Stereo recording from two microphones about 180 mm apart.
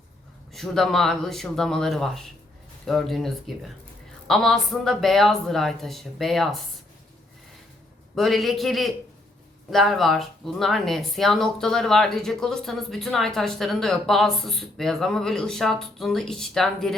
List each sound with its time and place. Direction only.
0.5 s speech: centre (ahead or behind)
8.1 s speech: centre (ahead or behind)